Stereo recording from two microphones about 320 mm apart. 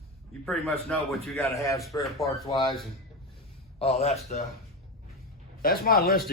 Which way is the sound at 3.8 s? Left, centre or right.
Centre.